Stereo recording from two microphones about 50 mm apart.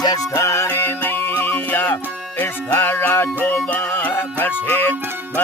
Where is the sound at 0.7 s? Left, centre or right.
Left.